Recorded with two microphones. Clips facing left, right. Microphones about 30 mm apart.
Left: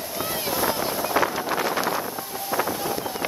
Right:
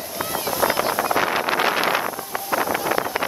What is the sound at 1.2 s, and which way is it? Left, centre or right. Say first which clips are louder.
Vehicle: right 5 dB; right.